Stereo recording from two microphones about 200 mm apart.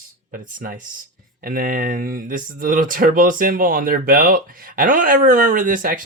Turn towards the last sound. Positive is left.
turn(degrees=-45)  # may be behind; listen again after turning